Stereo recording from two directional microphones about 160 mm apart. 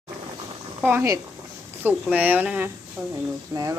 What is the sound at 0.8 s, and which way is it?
Speech, 15° right (ahead or behind).